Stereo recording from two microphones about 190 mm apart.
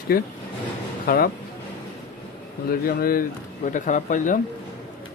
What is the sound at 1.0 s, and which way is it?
Speech, 50° left (ahead or behind).